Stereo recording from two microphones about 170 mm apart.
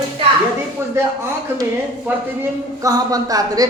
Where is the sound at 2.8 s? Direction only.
20° right (ahead or behind).